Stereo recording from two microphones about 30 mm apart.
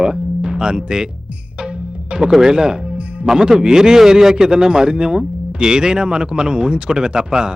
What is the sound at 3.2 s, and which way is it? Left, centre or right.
A man's voice, centre.